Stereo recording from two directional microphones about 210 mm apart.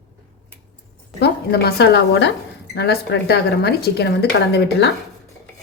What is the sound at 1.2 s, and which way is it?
A woman's voice, 50° left (ahead or behind).